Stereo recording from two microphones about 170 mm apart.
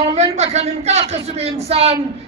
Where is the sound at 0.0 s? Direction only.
40° right (ahead or behind).